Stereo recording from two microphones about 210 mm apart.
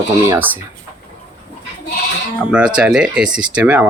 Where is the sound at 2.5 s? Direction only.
5° right (ahead or behind).